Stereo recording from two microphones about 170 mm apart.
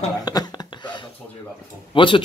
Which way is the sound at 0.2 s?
25° left (ahead or behind).